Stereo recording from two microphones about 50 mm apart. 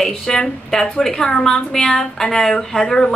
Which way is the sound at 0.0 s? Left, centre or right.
Centre.